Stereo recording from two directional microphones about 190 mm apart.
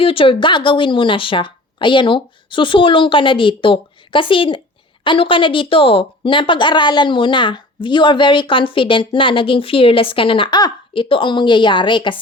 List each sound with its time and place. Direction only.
0.0 s a woman's voice: 30° left (ahead or behind)